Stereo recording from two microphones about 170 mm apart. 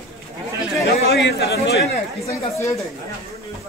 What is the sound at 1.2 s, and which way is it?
Speech, 70° left (ahead or behind).